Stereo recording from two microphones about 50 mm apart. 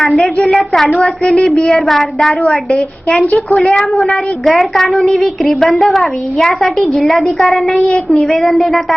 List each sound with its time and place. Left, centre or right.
0.4 s child singing: centre
3.2 s a woman's voice: centre